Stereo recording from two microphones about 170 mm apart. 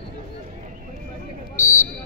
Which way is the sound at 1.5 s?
15° left (ahead or behind).